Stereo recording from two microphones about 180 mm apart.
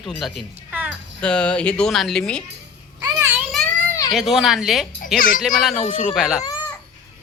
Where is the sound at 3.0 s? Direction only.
15° right (ahead or behind).